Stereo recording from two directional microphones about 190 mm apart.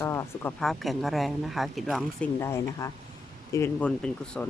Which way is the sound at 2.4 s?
15° left (ahead or behind).